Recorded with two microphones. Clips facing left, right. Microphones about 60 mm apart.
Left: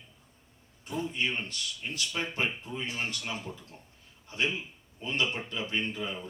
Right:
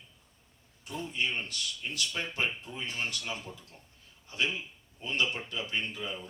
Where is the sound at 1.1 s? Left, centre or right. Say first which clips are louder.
Left 1 dB; left.